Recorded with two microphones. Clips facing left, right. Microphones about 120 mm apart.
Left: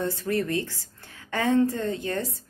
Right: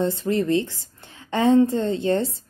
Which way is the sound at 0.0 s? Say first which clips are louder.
Right 5 dB; 20° right (ahead or behind).